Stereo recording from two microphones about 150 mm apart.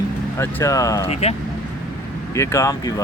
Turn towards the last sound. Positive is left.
turn(degrees=20)  # may be behind; listen again after turning